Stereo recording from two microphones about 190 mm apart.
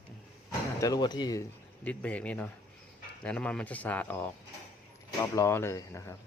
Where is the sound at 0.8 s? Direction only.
20° left (ahead or behind).